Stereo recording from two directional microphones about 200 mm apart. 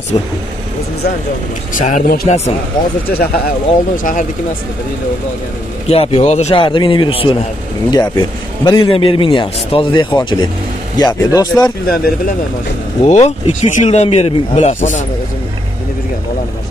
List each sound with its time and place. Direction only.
0.1 s a man's voice: 25° left (ahead or behind)
1.7 s speech: 40° left (ahead or behind)
2.2 s speech: 35° left (ahead or behind)
3.1 s speech: 45° left (ahead or behind)
5.9 s a man's voice: 30° left (ahead or behind)
13.0 s speech: 35° left (ahead or behind)